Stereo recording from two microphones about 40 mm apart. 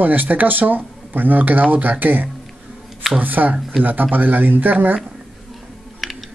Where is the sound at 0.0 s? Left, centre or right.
Right.